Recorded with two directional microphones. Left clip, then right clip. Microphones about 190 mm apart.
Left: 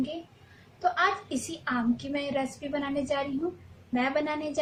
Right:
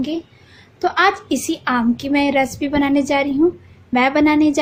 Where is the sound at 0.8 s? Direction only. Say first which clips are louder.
Right 10 dB; 45° right (ahead or behind).